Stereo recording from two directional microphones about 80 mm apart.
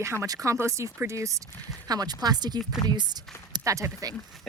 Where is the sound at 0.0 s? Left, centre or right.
Right.